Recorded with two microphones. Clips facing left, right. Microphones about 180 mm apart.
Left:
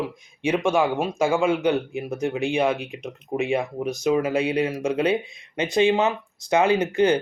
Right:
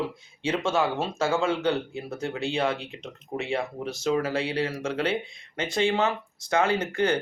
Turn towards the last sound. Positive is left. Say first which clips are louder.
# left 5 dB
turn(degrees=20)  # may be behind; listen again after turning